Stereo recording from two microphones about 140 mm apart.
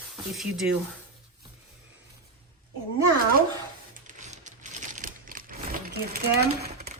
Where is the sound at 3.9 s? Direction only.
65° right (ahead or behind); by 6.2 s 90° right.